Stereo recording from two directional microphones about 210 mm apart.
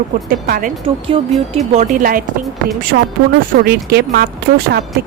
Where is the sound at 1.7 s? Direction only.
35° right (ahead or behind).